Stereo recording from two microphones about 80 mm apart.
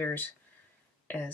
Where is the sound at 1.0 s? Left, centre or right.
Left.